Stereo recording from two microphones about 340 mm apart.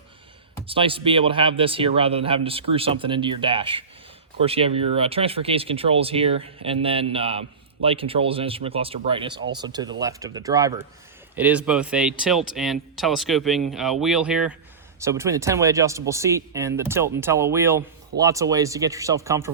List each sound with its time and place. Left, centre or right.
0.7 s a man's voice: centre